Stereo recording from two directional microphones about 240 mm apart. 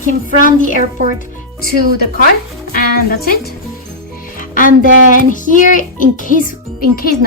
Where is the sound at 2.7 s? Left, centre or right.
Left.